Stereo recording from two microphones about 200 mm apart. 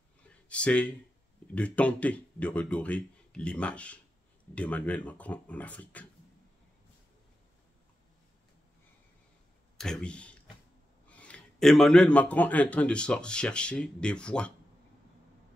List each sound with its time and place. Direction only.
0.5 s speech: 5° left (ahead or behind)
9.8 s speech: 5° left (ahead or behind)